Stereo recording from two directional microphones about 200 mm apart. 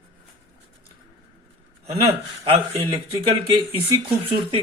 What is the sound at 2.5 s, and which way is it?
Speech, 25° right (ahead or behind).